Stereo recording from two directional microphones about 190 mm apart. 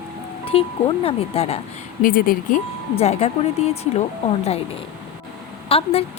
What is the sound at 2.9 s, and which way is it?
Speech, 35° left (ahead or behind).